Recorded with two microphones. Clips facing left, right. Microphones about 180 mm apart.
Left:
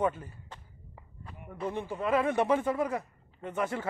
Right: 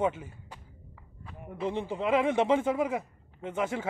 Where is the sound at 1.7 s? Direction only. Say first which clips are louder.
Right 2 dB; 30° right (ahead or behind).